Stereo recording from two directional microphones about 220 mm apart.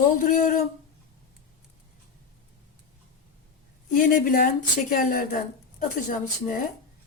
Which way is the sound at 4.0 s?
40° left (ahead or behind).